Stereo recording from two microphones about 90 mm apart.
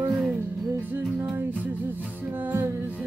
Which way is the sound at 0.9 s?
25° right (ahead or behind).